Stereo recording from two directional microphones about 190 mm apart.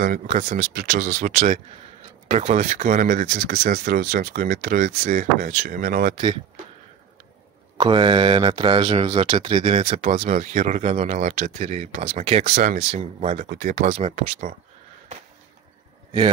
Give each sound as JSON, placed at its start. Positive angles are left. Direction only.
{"t": 0.0, "sound": "speech", "side_deg": -45}
{"t": 0.7, "sound": "speech", "side_deg": -55}
{"t": 1.3, "sound": "speech", "side_deg": -35}
{"t": 7.7, "sound": "speech", "side_deg": -25}
{"t": 13.5, "sound": "speech", "side_deg": -45}